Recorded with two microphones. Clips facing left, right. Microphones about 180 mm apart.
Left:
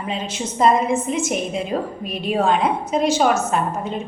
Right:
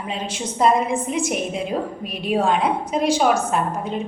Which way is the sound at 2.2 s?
Centre (ahead or behind).